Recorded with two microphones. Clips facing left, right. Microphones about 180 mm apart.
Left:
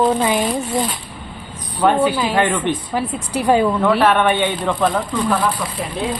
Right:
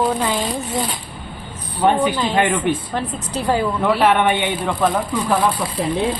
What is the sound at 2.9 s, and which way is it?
Speech, 10° left (ahead or behind).